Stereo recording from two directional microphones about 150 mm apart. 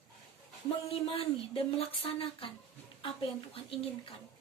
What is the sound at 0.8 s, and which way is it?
A woman's voice, 40° left (ahead or behind).